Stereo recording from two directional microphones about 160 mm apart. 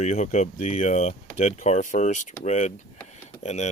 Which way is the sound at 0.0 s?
45° left (ahead or behind).